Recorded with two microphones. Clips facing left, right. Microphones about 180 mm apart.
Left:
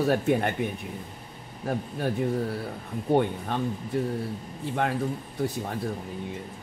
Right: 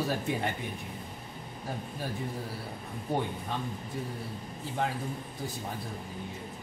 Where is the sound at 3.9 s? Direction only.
70° left (ahead or behind).